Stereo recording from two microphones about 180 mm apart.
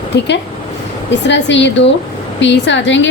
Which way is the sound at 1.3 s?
80° left.